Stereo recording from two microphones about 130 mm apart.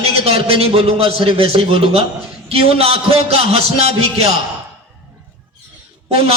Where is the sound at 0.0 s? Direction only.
50° right (ahead or behind).